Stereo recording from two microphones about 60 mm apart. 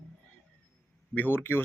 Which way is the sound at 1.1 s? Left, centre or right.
Left.